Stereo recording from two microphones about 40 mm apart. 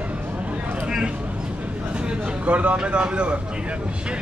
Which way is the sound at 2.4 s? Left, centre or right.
Right.